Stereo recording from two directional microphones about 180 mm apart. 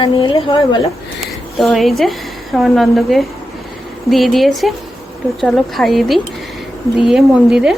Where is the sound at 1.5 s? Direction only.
Centre (ahead or behind).